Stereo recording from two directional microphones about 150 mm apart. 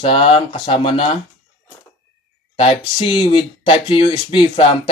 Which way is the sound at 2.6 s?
40° left (ahead or behind).